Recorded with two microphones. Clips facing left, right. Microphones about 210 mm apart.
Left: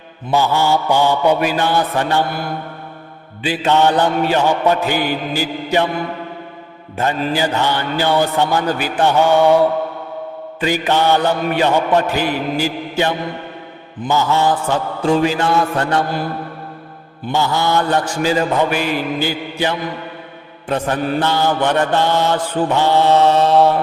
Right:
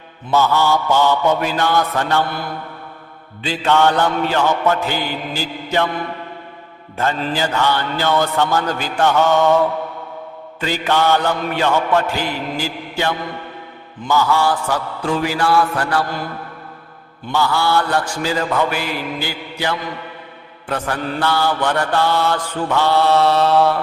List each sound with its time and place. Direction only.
0.3 s mantra: 15° left (ahead or behind)
3.4 s mantra: 15° left (ahead or behind)
6.9 s mantra: 15° left (ahead or behind)
17.3 s mantra: 20° left (ahead or behind)